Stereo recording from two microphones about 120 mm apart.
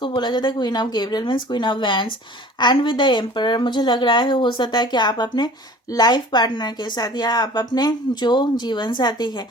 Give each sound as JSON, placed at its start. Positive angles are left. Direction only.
{"t": 0.2, "sound": "speech", "side_deg": 40}